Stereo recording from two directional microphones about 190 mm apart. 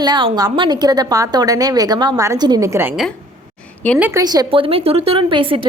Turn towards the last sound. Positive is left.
turn(degrees=-25)  # may be behind; listen again after turning